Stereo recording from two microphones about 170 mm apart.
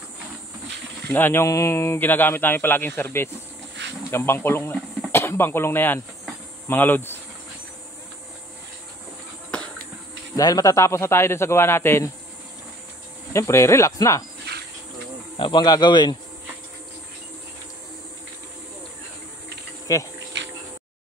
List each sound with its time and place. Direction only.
1.1 s a man's voice: 15° left (ahead or behind)
3.8 s insect: 90° right
4.1 s a man's voice: 15° left (ahead or behind)
10.3 s a man's voice: 20° left (ahead or behind)
13.3 s a man's voice: 15° left (ahead or behind)
14.5 s a sound: 75° right (ahead or behind)
15.3 s speech: 25° left (ahead or behind)
19.9 s speech: 20° left (ahead or behind)
20.4 s a sound: 90° right